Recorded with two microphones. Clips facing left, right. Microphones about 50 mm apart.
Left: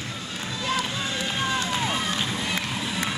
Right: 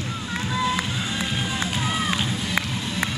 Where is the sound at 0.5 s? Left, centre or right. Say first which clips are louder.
Right 3 dB; right.